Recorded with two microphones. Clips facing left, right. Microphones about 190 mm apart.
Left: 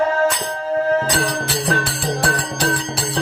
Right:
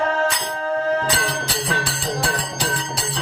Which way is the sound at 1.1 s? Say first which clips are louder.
Left 4 dB; 50° left (ahead or behind).